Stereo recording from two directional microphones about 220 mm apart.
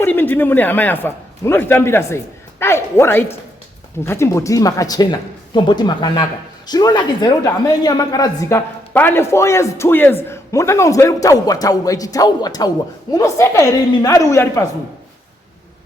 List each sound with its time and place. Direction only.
0.0 s a woman's voice: 10° left (ahead or behind)